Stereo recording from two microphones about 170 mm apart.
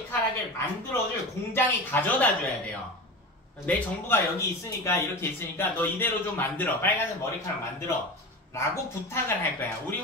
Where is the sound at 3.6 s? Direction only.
15° left (ahead or behind).